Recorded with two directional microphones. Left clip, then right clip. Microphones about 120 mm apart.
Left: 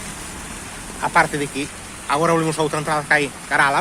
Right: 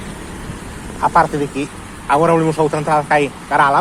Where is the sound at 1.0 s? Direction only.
25° left (ahead or behind).